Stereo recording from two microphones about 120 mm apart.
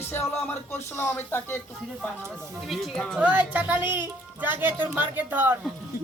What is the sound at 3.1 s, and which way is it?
Speech, 10° right (ahead or behind).